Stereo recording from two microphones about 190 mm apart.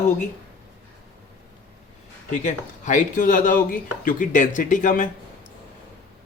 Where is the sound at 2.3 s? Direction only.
40° left (ahead or behind).